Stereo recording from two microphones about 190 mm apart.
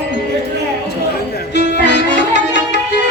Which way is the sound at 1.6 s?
60° left (ahead or behind).